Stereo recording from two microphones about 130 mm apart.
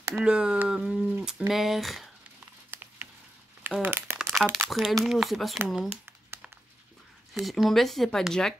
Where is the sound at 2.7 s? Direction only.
15° right (ahead or behind).